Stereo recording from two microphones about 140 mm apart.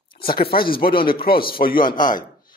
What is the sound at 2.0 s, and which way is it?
Speech, 70° left (ahead or behind).